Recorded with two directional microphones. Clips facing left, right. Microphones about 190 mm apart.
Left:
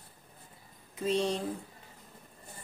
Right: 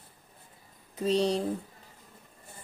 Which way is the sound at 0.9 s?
35° right (ahead or behind).